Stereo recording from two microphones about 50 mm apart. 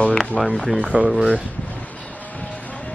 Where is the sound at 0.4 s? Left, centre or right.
Centre.